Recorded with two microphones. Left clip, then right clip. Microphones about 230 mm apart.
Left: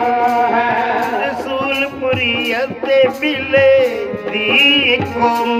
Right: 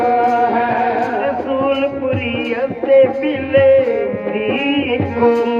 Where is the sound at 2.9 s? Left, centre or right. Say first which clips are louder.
Right 2 dB; left.